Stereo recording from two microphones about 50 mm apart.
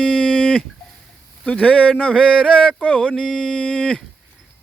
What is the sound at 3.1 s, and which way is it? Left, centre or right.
Speech, centre.